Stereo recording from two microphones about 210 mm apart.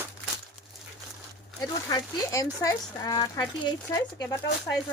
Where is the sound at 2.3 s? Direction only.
15° left (ahead or behind).